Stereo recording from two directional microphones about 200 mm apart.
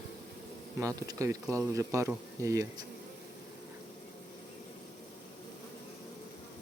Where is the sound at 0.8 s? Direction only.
15° right (ahead or behind).